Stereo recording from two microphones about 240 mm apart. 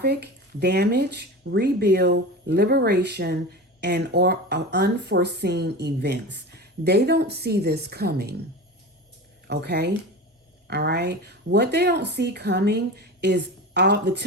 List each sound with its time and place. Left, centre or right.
0.0 s speech: right
9.5 s speech: right